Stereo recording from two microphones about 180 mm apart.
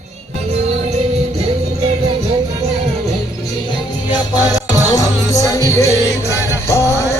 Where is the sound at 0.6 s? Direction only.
35° right (ahead or behind).